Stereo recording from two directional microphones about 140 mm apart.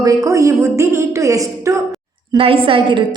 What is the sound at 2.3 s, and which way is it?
Speech, 40° right (ahead or behind).